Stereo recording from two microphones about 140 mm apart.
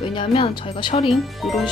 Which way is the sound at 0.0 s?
40° left (ahead or behind).